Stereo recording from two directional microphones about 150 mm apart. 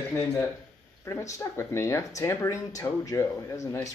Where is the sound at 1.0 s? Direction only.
20° left (ahead or behind).